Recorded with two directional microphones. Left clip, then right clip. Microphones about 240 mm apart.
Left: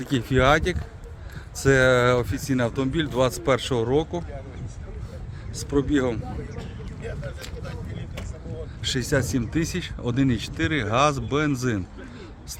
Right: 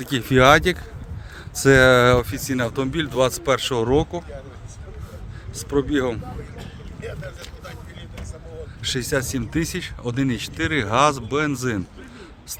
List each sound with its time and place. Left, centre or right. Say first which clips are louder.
0.0 s speech: right 5 dB; right
5.5 s speech: right 2 dB; centre
7.6 s vehicle: even; right
8.8 s speech: right 1 dB; centre